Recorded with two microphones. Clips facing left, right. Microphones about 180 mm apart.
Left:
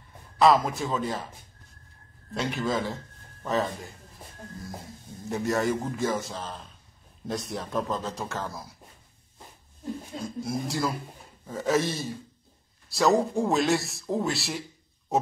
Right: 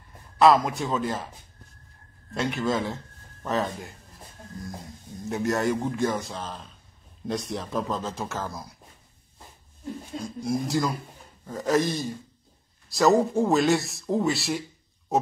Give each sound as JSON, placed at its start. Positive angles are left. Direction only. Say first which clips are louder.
{"t": 0.4, "sound": "speech", "louder": "right 2 dB", "side_deg": 0}
{"t": 2.3, "sound": "speech", "louder": "right 2 dB", "side_deg": 0}
{"t": 5.3, "sound": "speech", "louder": "right 1 dB", "side_deg": 0}
{"t": 10.1, "sound": "speech", "louder": "right 5 dB", "side_deg": 0}